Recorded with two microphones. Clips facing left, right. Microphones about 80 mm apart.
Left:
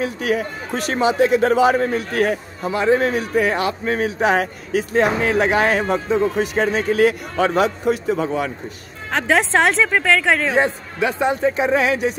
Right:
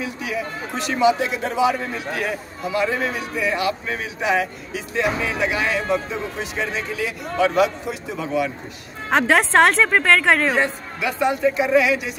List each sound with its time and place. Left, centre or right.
0.0 s speech: left
2.7 s speech: left
3.0 s speech: left
9.1 s a woman's voice: centre
10.5 s speech: left